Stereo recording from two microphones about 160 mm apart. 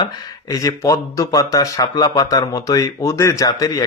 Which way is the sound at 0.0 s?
20° left (ahead or behind).